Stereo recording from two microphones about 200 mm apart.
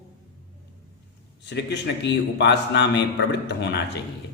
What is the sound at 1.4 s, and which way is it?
A man's voice, 60° left (ahead or behind).